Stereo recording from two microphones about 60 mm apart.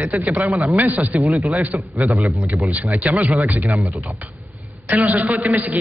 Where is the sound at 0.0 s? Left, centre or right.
Right.